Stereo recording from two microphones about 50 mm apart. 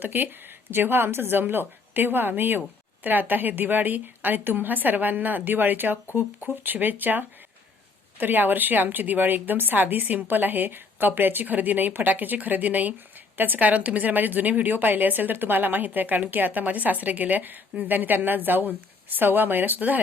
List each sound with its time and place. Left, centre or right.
0.0 s a woman's voice: right